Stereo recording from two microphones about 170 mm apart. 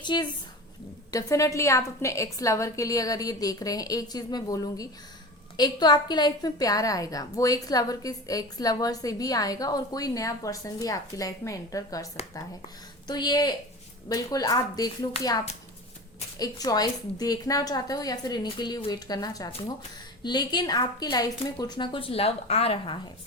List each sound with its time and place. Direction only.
0.0 s a woman's voice: 25° left (ahead or behind)
13.1 s a woman's voice: 25° left (ahead or behind)